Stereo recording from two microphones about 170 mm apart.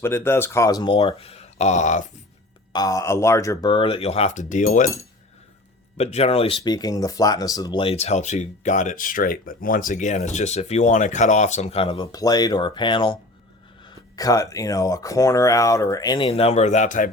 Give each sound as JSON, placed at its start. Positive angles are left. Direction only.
{"t": 0.0, "sound": "speech", "side_deg": 15}
{"t": 2.7, "sound": "speech", "side_deg": 20}
{"t": 6.0, "sound": "speech", "side_deg": 40}
{"t": 6.6, "sound": "speech", "side_deg": 20}
{"t": 16.3, "sound": "speech", "side_deg": 35}